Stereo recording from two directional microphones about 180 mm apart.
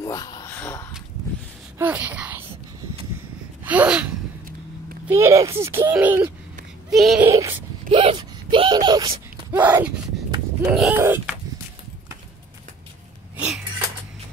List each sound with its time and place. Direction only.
0.0 s a sound: 20° left (ahead or behind)
1.8 s speech: 10° right (ahead or behind)
3.6 s sneeze: 10° right (ahead or behind)
5.0 s a child's voice: 15° right (ahead or behind)
6.9 s speech: centre (ahead or behind)
7.2 s a child's voice: 15° right (ahead or behind)
7.9 s speech: 30° right (ahead or behind)
9.5 s a child's voice: 10° right (ahead or behind)